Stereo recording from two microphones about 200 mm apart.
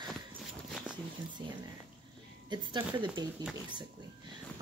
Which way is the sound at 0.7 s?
Centre (ahead or behind).